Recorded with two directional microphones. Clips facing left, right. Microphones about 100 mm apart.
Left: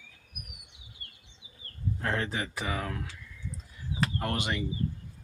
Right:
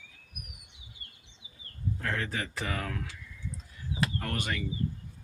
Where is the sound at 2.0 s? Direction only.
30° left (ahead or behind).